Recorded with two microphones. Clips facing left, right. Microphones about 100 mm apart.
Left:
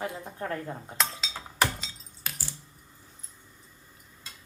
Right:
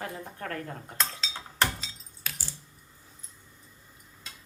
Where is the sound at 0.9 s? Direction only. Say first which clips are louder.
Left 1 dB; 10° left (ahead or behind).